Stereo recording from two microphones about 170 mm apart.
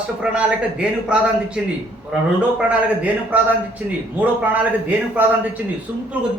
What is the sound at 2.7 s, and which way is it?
A man's voice, 10° right (ahead or behind).